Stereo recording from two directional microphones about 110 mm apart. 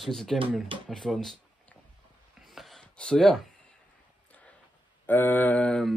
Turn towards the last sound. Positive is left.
turn(degrees=15)  # may be behind; listen again after turning